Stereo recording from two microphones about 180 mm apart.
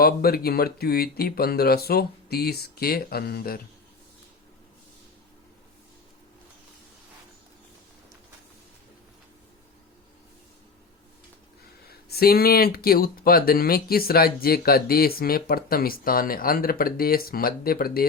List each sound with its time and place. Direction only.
0.0 s speech: 55° left (ahead or behind)
11.9 s speech: 60° left (ahead or behind)